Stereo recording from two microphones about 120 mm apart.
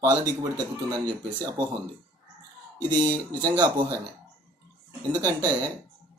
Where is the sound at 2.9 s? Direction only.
35° right (ahead or behind).